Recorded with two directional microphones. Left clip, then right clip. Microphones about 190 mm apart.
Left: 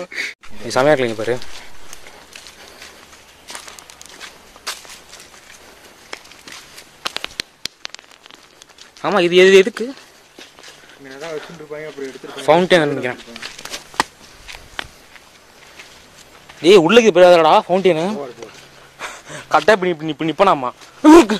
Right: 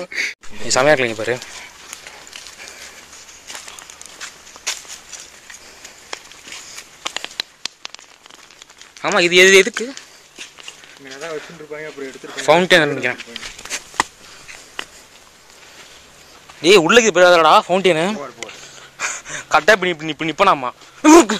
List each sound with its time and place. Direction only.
0.0 s speech: centre (ahead or behind)
6.1 s a sound: 20° right (ahead or behind)
7.0 s a sound: centre (ahead or behind)
9.0 s speech: 15° left (ahead or behind)
11.1 s speech: 30° left (ahead or behind)
12.3 s speech: 10° left (ahead or behind)
16.6 s speech: 15° left (ahead or behind); by 18.5 s 5° right (ahead or behind)
18.9 s a sound: 5° left (ahead or behind)
19.2 s speech: 15° left (ahead or behind)